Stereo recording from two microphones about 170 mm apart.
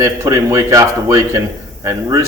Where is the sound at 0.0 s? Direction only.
20° right (ahead or behind).